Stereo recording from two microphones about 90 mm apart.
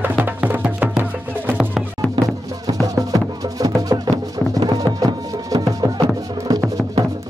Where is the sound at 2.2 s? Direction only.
40° right (ahead or behind).